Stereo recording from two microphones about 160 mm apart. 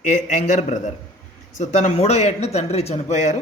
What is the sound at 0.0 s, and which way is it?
Speech, 50° left (ahead or behind).